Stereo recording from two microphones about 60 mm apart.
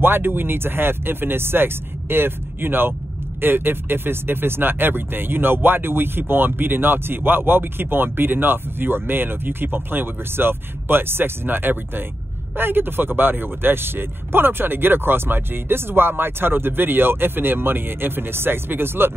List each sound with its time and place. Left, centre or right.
0.0 s speech: right